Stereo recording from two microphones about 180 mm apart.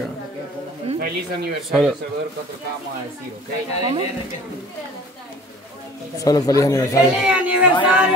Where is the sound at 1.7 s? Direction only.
Centre (ahead or behind).